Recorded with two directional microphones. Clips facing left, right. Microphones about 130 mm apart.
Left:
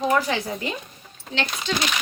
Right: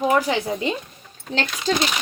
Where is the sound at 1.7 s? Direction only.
40° right (ahead or behind).